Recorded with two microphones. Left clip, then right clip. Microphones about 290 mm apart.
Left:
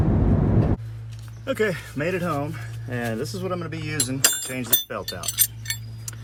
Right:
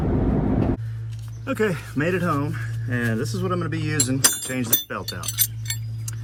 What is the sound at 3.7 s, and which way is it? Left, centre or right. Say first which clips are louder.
Speech: right 3 dB; left.